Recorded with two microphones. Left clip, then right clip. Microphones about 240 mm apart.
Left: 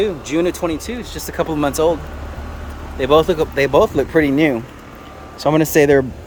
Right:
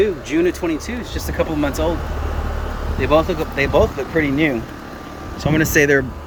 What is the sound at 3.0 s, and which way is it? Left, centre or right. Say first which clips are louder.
Speech: left 3 dB; left.